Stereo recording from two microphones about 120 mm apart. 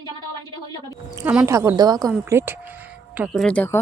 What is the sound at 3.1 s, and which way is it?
Speech, 5° right (ahead or behind).